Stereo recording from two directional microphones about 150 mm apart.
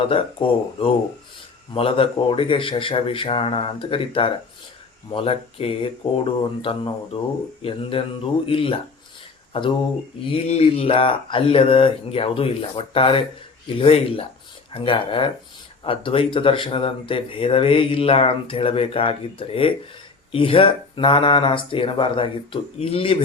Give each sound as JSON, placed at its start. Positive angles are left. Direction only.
{"t": 0.1, "sound": "speech", "side_deg": 35}